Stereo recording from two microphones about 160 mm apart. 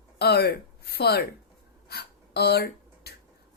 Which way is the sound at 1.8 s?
90° left.